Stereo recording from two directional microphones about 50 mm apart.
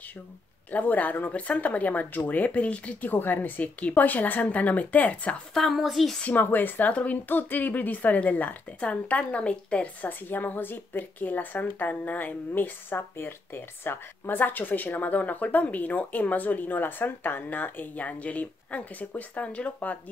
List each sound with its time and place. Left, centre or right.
0.7 s speech: left
3.1 s speech: left
5.5 s speech: centre
6.2 s speech: left
6.9 s a woman's voice: left
7.2 s speech: left
8.7 s a woman's voice: left
10.0 s speech: left